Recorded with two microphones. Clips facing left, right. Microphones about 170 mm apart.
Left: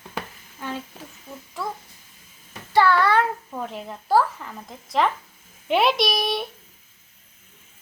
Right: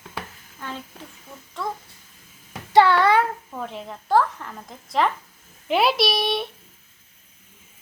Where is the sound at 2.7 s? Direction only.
20° right (ahead or behind).